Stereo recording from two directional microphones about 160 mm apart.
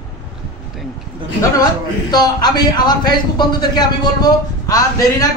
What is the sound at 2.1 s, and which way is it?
A man's voice, 25° left (ahead or behind).